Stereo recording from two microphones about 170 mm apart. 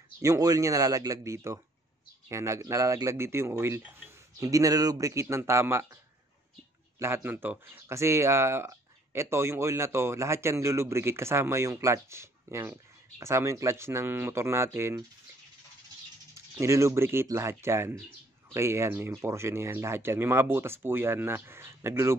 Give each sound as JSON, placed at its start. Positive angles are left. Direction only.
{"t": 0.2, "sound": "speech", "side_deg": -20}
{"t": 7.0, "sound": "speech", "side_deg": -15}
{"t": 16.5, "sound": "speech", "side_deg": -15}